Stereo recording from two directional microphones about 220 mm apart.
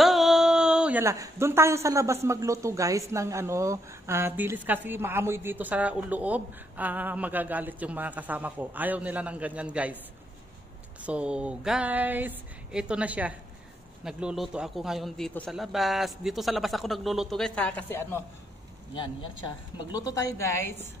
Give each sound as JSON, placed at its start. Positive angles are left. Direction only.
{"t": 0.0, "sound": "a sound", "side_deg": 0}
{"t": 2.2, "sound": "speech", "side_deg": -15}
{"t": 11.0, "sound": "speech", "side_deg": -5}
{"t": 18.9, "sound": "a woman's voice", "side_deg": 20}